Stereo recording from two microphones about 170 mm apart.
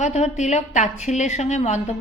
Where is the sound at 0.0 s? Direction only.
40° left (ahead or behind).